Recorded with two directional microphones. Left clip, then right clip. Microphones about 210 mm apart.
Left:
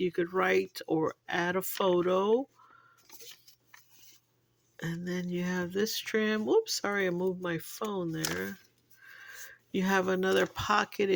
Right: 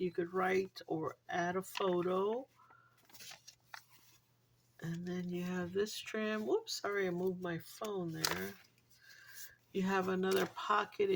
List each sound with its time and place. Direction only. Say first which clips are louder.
0.0 s speech: left 7 dB; 40° left (ahead or behind)
4.8 s speech: left 7 dB; 40° left (ahead or behind)
9.7 s speech: left 7 dB; 35° left (ahead or behind)